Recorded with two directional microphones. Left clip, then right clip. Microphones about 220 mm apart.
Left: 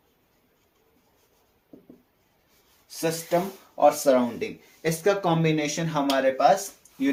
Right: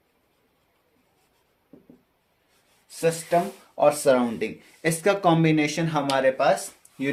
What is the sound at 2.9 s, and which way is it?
Speech, 40° right (ahead or behind).